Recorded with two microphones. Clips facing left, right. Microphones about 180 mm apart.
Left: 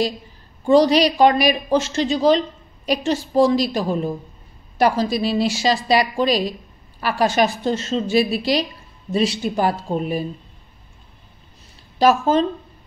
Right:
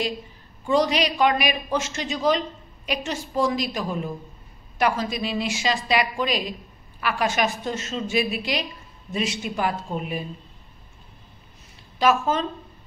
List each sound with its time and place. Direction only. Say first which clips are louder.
0.7 s speech: left 7 dB; 35° left (ahead or behind)
12.0 s speech: left 5 dB; 35° left (ahead or behind)